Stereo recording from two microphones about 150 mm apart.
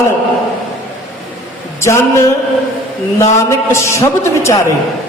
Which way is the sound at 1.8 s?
20° left (ahead or behind).